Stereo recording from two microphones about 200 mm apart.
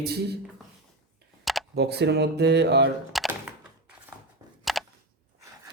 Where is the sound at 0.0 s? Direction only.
55° right (ahead or behind).